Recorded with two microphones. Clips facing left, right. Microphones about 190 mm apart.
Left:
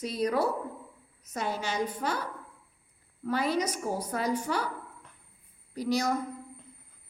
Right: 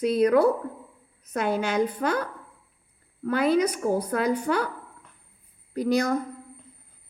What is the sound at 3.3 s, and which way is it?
A woman's voice, 55° right (ahead or behind).